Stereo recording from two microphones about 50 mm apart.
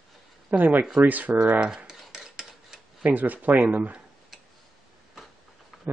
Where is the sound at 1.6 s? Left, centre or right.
Centre.